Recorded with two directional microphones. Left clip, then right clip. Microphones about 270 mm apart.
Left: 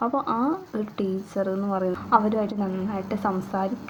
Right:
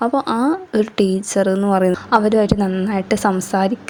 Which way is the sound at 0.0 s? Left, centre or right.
Right.